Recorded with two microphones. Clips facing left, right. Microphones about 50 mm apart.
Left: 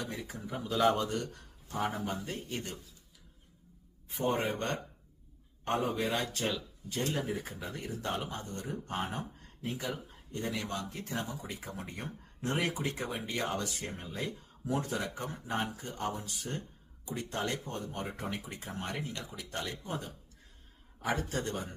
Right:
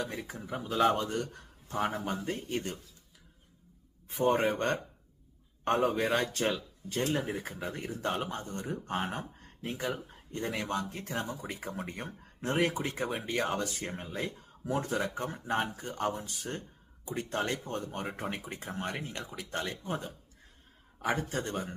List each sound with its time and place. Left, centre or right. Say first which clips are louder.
0.0 s speech: right 2 dB; right
4.1 s speech: right 4 dB; right
5.6 s speech: right 4 dB; right